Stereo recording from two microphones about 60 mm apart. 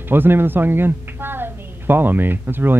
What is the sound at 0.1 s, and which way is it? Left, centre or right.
A woman's voice, right.